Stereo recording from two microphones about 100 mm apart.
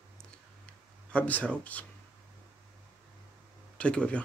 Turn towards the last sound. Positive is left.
turn(degrees=10)  # may be behind; listen again after turning